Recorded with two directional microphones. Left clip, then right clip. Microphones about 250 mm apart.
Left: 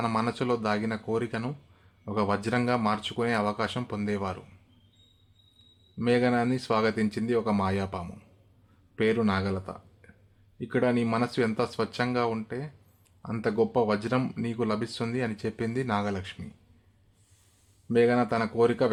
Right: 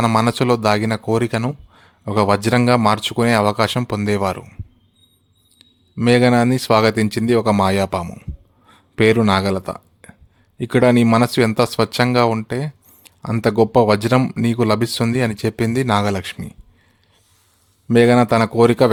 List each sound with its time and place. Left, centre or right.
0.0 s speech: right
5.5 s speech: right
17.8 s speech: right